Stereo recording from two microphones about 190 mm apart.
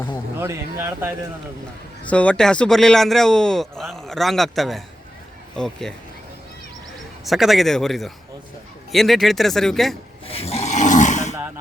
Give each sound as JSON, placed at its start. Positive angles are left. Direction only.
{"t": 0.3, "sound": "speech", "side_deg": -15}
{"t": 2.0, "sound": "speech", "side_deg": 5}
{"t": 7.3, "sound": "speech", "side_deg": 0}
{"t": 10.2, "sound": "a sound", "side_deg": 30}